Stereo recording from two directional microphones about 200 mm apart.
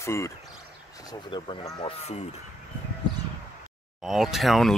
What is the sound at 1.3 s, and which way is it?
Speech, 20° left (ahead or behind).